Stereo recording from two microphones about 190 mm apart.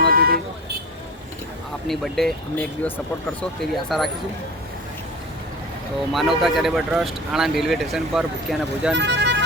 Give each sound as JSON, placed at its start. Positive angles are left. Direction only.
{"t": 0.1, "sound": "vehicle", "side_deg": -50}
{"t": 1.9, "sound": "speech", "side_deg": 0}
{"t": 6.1, "sound": "speech", "side_deg": 0}
{"t": 8.9, "sound": "speech", "side_deg": -65}